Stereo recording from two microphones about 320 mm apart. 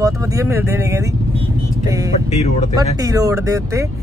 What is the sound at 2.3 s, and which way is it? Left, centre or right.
Speech, left.